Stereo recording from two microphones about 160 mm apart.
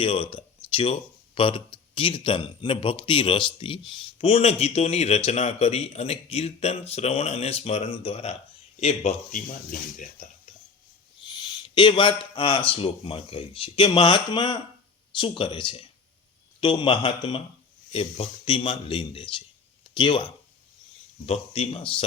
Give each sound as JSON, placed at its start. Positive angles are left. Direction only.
{"t": 0.0, "sound": "a man's voice", "side_deg": 35}
{"t": 11.3, "sound": "a man's voice", "side_deg": 30}